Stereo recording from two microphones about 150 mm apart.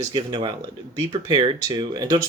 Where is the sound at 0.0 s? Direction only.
30° right (ahead or behind).